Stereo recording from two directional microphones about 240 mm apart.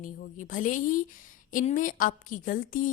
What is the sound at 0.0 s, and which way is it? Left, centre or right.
A woman's voice, left.